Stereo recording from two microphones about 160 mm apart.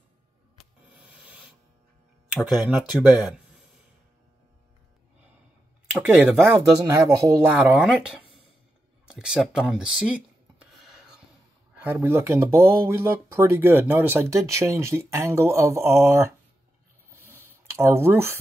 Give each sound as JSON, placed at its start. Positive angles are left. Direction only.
{"t": 0.9, "sound": "owl", "side_deg": -10}
{"t": 2.4, "sound": "speech", "side_deg": -5}
{"t": 5.9, "sound": "speech", "side_deg": -10}
{"t": 9.0, "sound": "a sound", "side_deg": -5}
{"t": 11.8, "sound": "speech", "side_deg": -15}
{"t": 17.1, "sound": "a sound", "side_deg": -15}